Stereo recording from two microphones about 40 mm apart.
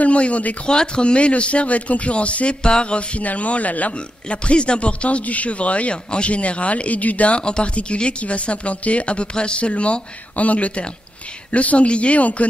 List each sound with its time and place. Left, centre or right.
0.0 s speech: left
0.7 s a man's voice: left